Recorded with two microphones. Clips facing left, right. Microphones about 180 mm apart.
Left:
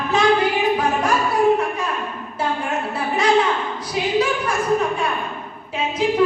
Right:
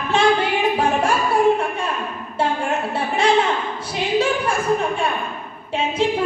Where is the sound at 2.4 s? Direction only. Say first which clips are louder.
Right 2 dB; 30° right (ahead or behind).